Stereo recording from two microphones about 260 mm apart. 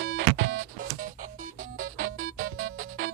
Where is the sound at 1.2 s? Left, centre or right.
Right.